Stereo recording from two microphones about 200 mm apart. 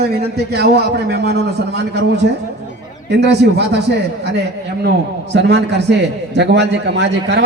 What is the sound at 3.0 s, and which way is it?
Speech, 60° right (ahead or behind).